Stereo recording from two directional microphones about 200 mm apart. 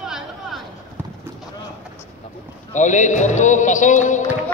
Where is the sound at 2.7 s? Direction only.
40° left (ahead or behind).